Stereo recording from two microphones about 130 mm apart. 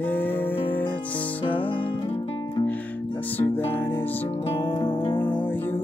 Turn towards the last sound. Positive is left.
turn(degrees=15)  # may be behind; listen again after turning